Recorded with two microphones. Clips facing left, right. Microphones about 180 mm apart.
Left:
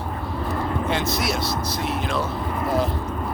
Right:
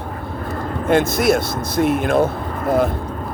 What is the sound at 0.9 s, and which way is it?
Speech, 50° right (ahead or behind).